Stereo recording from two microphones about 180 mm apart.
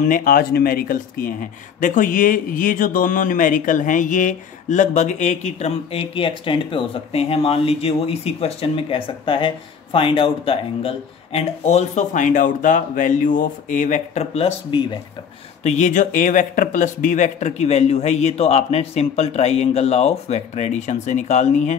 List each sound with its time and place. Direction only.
0.0 s speech: 50° left (ahead or behind); by 15.0 s 25° left (ahead or behind)
15.6 s speech: 45° left (ahead or behind)